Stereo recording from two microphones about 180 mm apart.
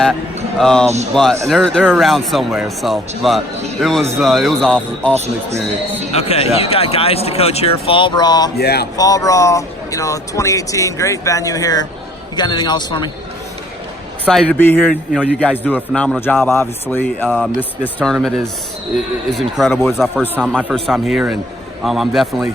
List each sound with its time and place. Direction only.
0.6 s speech: 5° left (ahead or behind)
6.1 s speech: 35° left (ahead or behind)
8.5 s speech: 65° left (ahead or behind)
9.0 s a man's voice: 20° left (ahead or behind)
14.3 s speech: 5° left (ahead or behind)
17.2 s speech: centre (ahead or behind)